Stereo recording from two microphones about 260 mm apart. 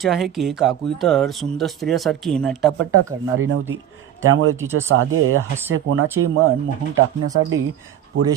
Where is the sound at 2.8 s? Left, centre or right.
Right.